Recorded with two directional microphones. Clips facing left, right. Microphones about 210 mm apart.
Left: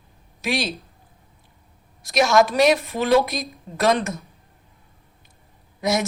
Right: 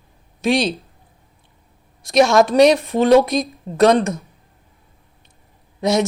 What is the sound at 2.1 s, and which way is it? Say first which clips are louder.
A woman's voice: right 4 dB; 30° right (ahead or behind).